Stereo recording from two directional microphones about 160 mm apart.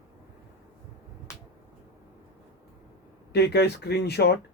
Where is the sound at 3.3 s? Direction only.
90° left.